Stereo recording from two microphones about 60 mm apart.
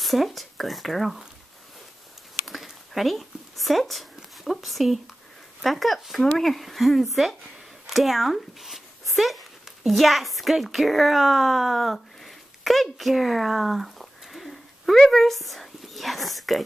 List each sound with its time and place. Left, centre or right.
0.0 s speech: centre
2.4 s a sound: centre
5.6 s speech: centre